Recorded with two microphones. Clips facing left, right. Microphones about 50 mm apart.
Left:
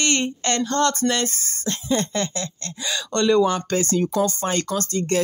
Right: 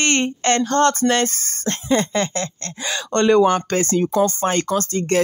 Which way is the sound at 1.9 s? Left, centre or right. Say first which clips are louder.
Right 4 dB; right.